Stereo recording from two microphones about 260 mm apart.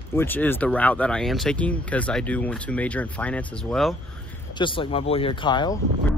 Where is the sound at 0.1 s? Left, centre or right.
Centre.